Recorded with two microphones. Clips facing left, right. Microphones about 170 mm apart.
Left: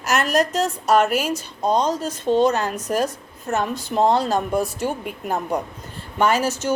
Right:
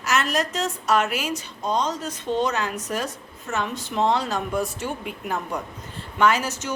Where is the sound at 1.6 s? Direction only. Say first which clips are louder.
Left 5 dB; 35° left (ahead or behind).